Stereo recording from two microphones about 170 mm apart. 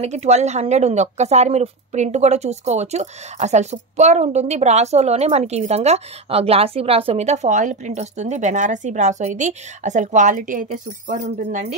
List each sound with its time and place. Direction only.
0.0 s a woman's voice: 40° right (ahead or behind)